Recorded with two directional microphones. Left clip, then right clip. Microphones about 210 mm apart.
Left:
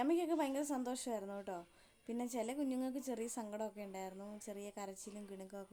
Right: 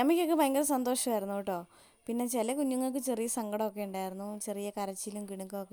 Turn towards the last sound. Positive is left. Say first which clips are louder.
# right 10 dB
turn(degrees=-40)  # may be behind; listen again after turning